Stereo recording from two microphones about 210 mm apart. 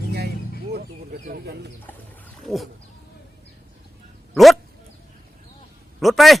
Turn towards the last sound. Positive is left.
turn(degrees=0)  # may be behind; listen again after turning